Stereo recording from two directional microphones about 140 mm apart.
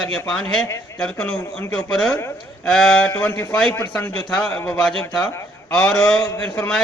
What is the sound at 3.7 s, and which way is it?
Speech, 25° left (ahead or behind).